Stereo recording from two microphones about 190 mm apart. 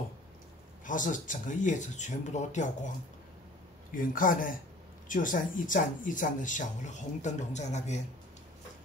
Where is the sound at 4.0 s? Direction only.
45° left (ahead or behind).